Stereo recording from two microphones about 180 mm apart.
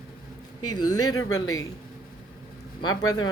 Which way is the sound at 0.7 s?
20° left (ahead or behind).